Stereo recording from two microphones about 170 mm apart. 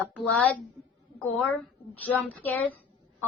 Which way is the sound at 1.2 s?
5° left (ahead or behind).